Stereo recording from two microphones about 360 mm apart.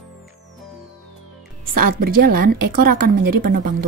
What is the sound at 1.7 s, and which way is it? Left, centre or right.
A woman's voice, right.